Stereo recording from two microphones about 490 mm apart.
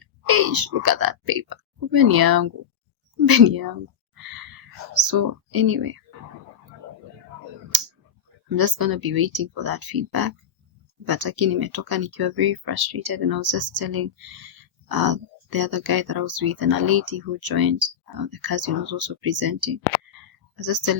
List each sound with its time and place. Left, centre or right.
0.0 s speech: right
4.2 s a sound: right
4.9 s speech: right
8.4 s speech: right